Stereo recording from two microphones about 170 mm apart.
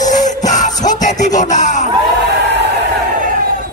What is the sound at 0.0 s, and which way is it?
Music, 45° left (ahead or behind).